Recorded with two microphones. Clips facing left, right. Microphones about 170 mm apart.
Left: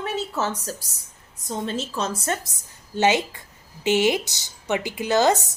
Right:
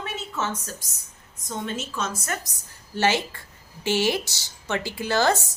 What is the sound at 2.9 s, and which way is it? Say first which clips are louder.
Speech: left 3 dB; 20° left (ahead or behind).